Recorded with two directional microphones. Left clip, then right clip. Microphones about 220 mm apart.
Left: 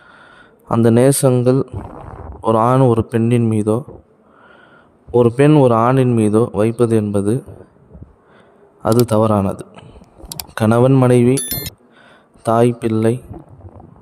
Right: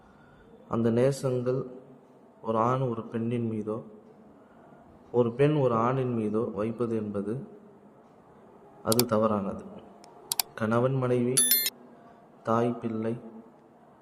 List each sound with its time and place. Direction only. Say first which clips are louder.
0.7 s speech: left 13 dB; 50° left (ahead or behind)
5.1 s speech: left 13 dB; 50° left (ahead or behind)
9.0 s speech: left 11 dB; 50° left (ahead or behind)
11.3 s speech: left 4 dB; centre (ahead or behind)
12.4 s speech: left 13 dB; 50° left (ahead or behind)